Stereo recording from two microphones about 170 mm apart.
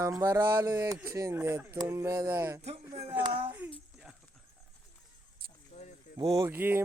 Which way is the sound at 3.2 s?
35° right (ahead or behind).